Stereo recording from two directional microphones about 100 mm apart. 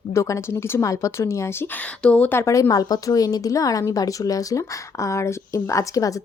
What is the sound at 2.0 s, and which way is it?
A woman's voice, 15° left (ahead or behind).